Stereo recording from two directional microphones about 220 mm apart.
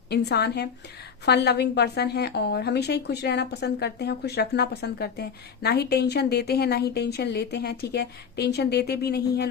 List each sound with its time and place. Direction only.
0.1 s a woman's voice: 50° left (ahead or behind)